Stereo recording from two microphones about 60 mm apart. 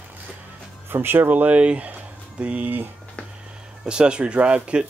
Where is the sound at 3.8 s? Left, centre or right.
Centre.